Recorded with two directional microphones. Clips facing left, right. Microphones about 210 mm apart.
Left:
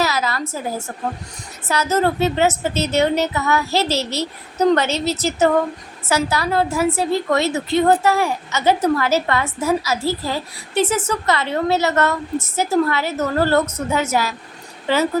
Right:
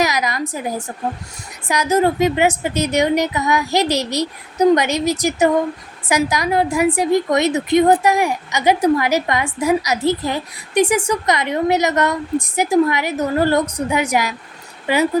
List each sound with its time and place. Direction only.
0.0 s a woman's voice: 15° right (ahead or behind)